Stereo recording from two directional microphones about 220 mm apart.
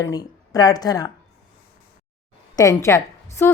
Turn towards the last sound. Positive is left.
turn(degrees=15)  # may be behind; listen again after turning